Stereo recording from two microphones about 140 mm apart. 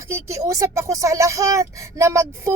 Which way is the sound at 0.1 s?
20° right (ahead or behind).